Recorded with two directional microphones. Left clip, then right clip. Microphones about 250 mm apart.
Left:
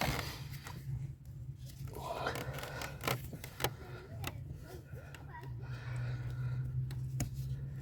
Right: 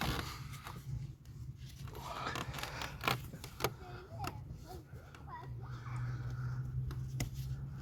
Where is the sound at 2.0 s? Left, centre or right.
Centre.